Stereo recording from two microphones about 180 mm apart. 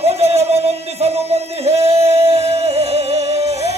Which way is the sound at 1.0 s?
35° right (ahead or behind).